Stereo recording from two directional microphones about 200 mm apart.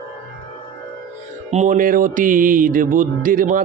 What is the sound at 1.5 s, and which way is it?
Speech, 40° right (ahead or behind).